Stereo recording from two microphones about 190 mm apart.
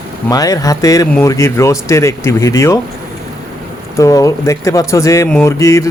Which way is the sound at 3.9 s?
15° left (ahead or behind).